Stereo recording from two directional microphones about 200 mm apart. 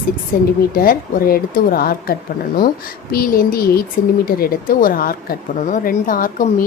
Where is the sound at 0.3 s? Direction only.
45° left (ahead or behind).